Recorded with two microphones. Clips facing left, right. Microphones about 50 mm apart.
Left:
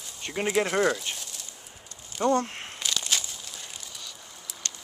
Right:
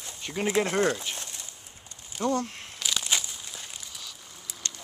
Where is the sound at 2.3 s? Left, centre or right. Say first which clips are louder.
Left 4 dB; left.